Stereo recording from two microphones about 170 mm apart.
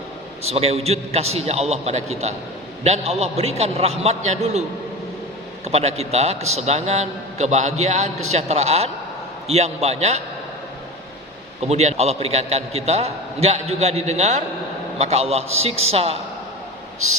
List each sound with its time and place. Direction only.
0.4 s a man's voice: 35° right (ahead or behind)
5.6 s a man's voice: 40° right (ahead or behind)
11.6 s a man's voice: 40° right (ahead or behind)